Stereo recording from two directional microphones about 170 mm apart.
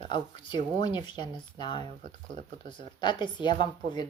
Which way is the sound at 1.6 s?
25° left (ahead or behind).